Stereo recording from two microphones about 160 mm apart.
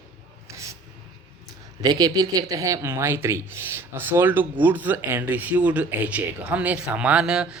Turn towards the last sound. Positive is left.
turn(degrees=-5)  # may be behind; listen again after turning